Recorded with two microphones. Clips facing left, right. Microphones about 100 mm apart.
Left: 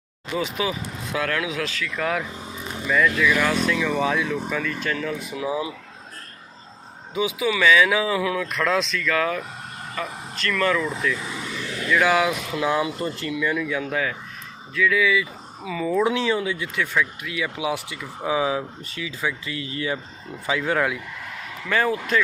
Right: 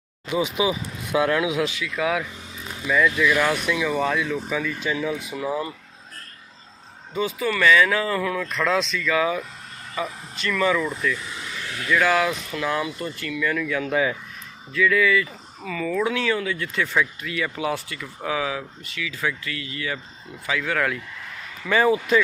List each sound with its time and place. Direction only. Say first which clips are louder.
0.3 s speech: right 3 dB; 10° right (ahead or behind)
2.0 s speech: right 2 dB; 5° right (ahead or behind)
7.1 s speech: left 1 dB; 5° left (ahead or behind)
12.5 s speech: left 4 dB; 20° left (ahead or behind)
13.9 s speech: right 7 dB; 10° right (ahead or behind)
14.7 s speech: right 1 dB; centre (ahead or behind); by 16.6 s 20° left (ahead or behind)
16.7 s speech: right 2 dB; centre (ahead or behind); by 20.8 s 25° left (ahead or behind)
21.7 s speech: right 3 dB; 5° right (ahead or behind)